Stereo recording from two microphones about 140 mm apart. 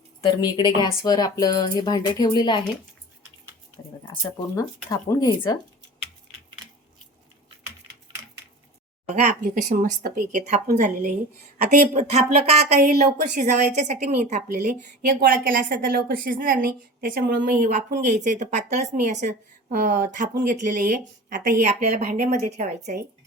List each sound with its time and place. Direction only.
0.2 s a woman's voice: 35° left (ahead or behind)
4.5 s speech: 25° left (ahead or behind)
7.9 s typing: 10° right (ahead or behind)
9.4 s speech: 75° right (ahead or behind)
12.1 s speech: 50° right (ahead or behind)
12.8 s a woman's voice: 90° right
13.7 s speech: 55° right (ahead or behind)
14.4 s a woman's voice: 70° right (ahead or behind)
15.0 s a woman's voice: 90° right; by 23.0 s 60° right (ahead or behind)